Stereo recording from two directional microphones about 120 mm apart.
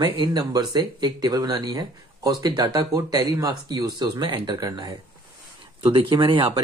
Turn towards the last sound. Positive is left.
turn(degrees=-40)  # may be behind; listen again after turning